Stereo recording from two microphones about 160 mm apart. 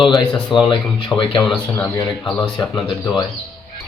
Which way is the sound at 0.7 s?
30° left (ahead or behind).